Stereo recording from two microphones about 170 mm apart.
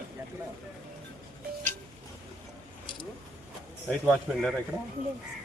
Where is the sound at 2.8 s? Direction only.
30° left (ahead or behind).